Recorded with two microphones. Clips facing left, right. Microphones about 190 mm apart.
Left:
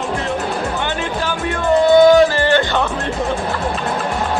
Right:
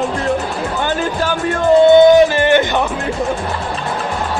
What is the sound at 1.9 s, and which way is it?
Music, 20° right (ahead or behind).